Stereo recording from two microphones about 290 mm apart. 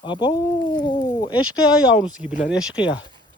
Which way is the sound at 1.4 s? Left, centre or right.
Left.